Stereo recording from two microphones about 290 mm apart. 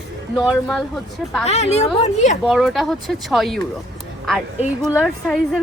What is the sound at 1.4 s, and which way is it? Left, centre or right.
Speech, left.